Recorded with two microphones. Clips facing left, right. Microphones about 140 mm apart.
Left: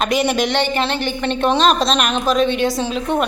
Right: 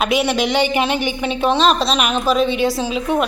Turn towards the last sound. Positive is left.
turn(degrees=-5)  # may be behind; listen again after turning